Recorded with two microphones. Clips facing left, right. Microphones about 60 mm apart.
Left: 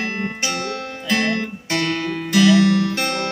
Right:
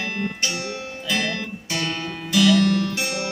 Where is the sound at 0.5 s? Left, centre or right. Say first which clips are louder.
Left 4 dB; left.